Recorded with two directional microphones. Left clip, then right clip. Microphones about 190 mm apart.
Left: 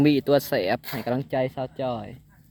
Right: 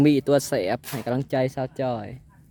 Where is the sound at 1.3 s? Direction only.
35° right (ahead or behind).